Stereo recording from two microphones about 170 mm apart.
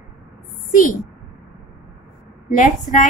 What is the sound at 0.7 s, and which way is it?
Speech, 50° left (ahead or behind).